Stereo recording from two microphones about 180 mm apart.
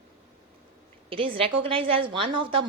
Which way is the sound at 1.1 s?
30° right (ahead or behind).